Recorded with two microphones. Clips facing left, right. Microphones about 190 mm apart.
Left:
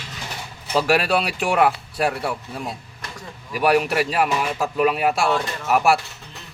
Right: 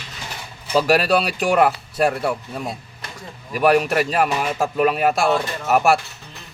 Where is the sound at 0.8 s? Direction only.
40° right (ahead or behind).